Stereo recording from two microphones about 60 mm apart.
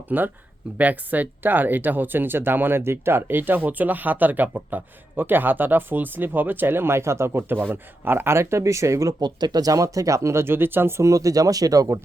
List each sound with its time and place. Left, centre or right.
0.1 s speech: right
9.6 s speech: right
11.0 s speech: right